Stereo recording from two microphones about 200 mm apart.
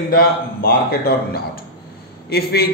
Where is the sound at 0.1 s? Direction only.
50° left (ahead or behind).